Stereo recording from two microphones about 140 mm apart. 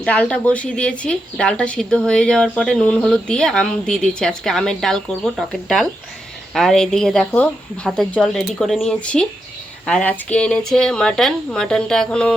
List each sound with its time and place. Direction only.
0.0 s a woman's voice: 10° left (ahead or behind)